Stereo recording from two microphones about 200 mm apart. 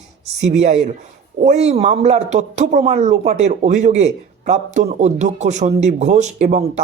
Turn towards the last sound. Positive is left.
turn(degrees=-35)  # may be behind; listen again after turning